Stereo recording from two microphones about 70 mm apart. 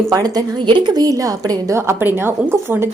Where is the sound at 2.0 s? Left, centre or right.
Right.